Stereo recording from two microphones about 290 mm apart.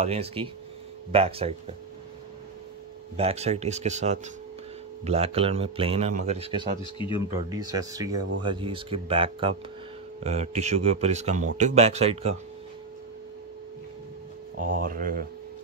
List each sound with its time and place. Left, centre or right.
0.0 s speech: right
3.2 s speech: right
6.8 s speech: centre
7.4 s speech: centre
14.6 s speech: right